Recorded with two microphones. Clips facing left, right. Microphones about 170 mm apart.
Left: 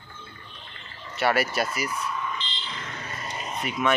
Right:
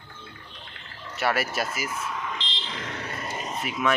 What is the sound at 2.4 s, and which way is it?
Fire alarm, 80° right.